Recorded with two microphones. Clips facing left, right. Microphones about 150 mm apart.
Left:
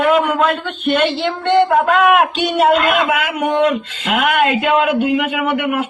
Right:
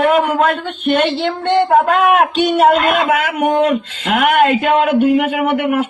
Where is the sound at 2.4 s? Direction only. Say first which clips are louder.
Right 2 dB; 45° right (ahead or behind).